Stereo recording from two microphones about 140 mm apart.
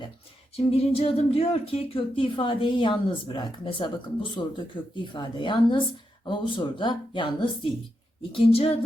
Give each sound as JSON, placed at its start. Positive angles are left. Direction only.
{"t": 0.5, "sound": "speech", "side_deg": 45}